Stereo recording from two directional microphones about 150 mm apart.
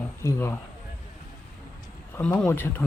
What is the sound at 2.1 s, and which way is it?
Speech, 10° left (ahead or behind).